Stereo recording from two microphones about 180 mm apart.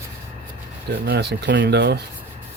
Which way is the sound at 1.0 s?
70° right (ahead or behind).